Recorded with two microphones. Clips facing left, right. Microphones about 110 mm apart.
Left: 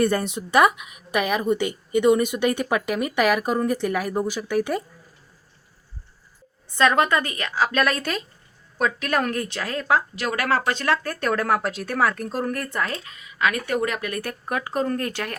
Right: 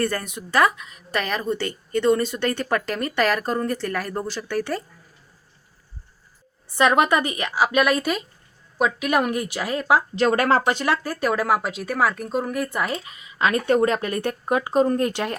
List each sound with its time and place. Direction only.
0.0 s speech: 20° left (ahead or behind)
6.7 s a woman's voice: 15° right (ahead or behind)
10.2 s speech: 30° right (ahead or behind)
10.7 s speech: 15° right (ahead or behind)
13.4 s speech: 30° right (ahead or behind)